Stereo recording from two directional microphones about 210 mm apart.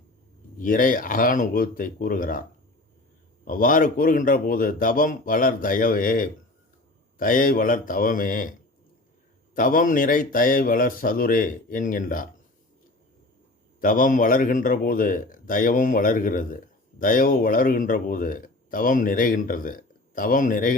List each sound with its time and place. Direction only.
0.6 s speech: 40° left (ahead or behind)
3.4 s speech: 40° left (ahead or behind)
9.6 s speech: 40° left (ahead or behind)
13.8 s speech: 40° left (ahead or behind)